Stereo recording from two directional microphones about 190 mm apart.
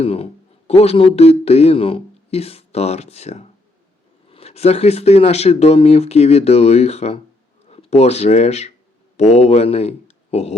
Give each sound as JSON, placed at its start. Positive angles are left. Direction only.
{"t": 0.0, "sound": "speech", "side_deg": 30}